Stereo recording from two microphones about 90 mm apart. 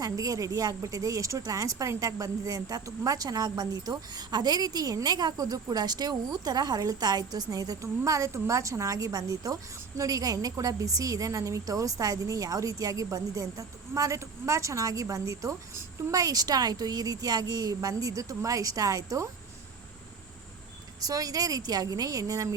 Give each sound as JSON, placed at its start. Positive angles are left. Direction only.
{"t": 0.0, "sound": "a woman's voice", "side_deg": -40}
{"t": 21.0, "sound": "a woman's voice", "side_deg": -45}